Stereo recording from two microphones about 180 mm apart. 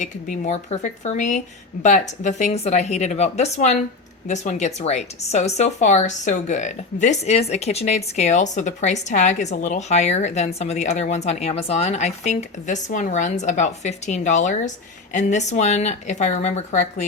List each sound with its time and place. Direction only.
0.0 s speech: 40° left (ahead or behind)